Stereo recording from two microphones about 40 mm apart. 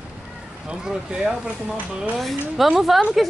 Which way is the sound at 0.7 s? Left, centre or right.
Right.